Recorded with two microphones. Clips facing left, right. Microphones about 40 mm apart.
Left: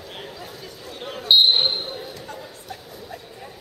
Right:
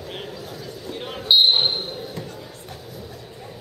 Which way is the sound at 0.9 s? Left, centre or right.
Centre.